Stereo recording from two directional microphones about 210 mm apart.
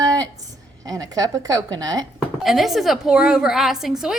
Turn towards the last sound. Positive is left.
turn(degrees=0)  # may be behind; listen again after turning